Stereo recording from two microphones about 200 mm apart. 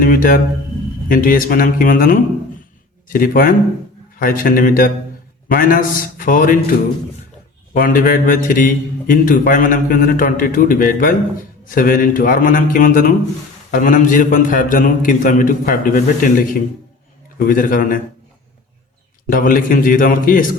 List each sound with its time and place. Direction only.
0.0 s a man's voice: 45° left (ahead or behind)
19.3 s a man's voice: 45° left (ahead or behind)